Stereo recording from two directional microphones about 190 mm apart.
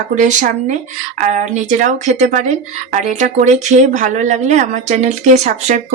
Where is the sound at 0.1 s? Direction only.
40° right (ahead or behind).